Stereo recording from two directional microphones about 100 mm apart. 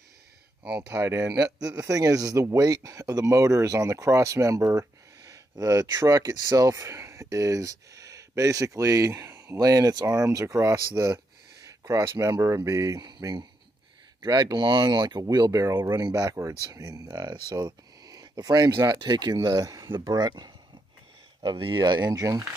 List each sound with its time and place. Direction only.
0.8 s speech: 30° right (ahead or behind)
11.8 s speech: 35° right (ahead or behind)
15.6 s speech: 30° right (ahead or behind); by 20.5 s 45° right (ahead or behind)
21.4 s speech: 55° right (ahead or behind); by 22.5 s 35° right (ahead or behind)